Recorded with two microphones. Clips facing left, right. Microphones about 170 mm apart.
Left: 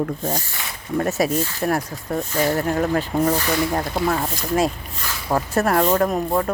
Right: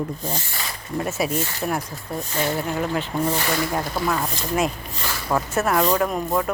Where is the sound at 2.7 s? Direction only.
40° left (ahead or behind).